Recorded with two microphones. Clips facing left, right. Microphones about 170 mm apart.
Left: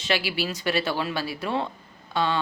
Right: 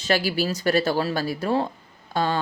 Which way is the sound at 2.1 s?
45° right (ahead or behind).